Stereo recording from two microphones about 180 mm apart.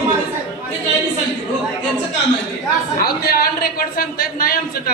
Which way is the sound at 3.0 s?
60° left (ahead or behind).